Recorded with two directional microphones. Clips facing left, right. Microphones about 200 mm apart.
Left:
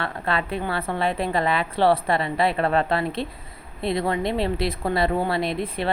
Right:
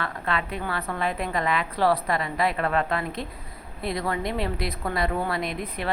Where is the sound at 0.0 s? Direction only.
30° left (ahead or behind).